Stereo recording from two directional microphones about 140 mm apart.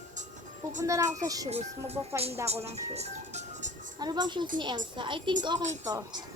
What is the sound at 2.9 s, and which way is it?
Music, 50° right (ahead or behind).